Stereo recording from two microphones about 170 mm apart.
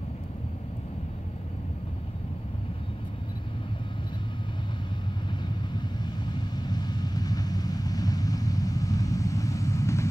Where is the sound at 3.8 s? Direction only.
30° left (ahead or behind).